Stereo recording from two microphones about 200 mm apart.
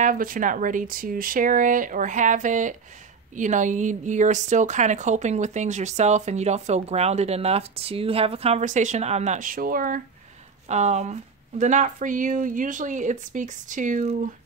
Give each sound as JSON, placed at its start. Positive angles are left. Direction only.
{"t": 0.0, "sound": "speech", "side_deg": -45}
{"t": 10.7, "sound": "speech", "side_deg": -35}